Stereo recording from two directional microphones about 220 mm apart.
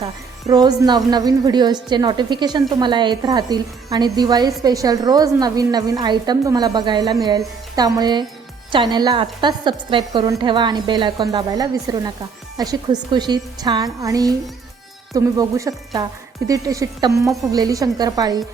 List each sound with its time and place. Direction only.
0.0 s a woman's voice: 20° right (ahead or behind)